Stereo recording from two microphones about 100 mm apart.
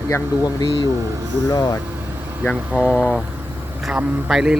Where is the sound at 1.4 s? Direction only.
40° left (ahead or behind).